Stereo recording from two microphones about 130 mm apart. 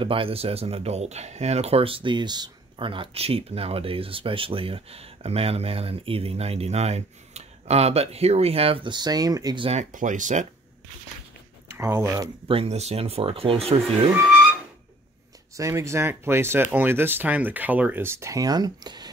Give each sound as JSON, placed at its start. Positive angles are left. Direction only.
{"t": 0.0, "sound": "speech", "side_deg": -45}
{"t": 9.9, "sound": "speech", "side_deg": -80}
{"t": 11.7, "sound": "speech", "side_deg": -20}
{"t": 12.4, "sound": "speech", "side_deg": -50}
{"t": 15.5, "sound": "speech", "side_deg": -25}